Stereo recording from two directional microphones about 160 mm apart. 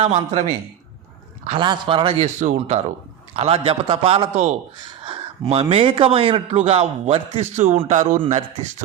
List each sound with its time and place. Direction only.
0.0 s speech: 40° right (ahead or behind)
1.5 s a man's voice: 30° right (ahead or behind)
2.2 s a man's voice: 45° right (ahead or behind)